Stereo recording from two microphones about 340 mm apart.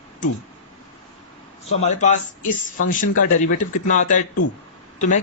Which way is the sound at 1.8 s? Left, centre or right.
Centre.